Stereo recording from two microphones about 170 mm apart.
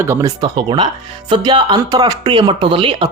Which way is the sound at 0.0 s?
15° right (ahead or behind).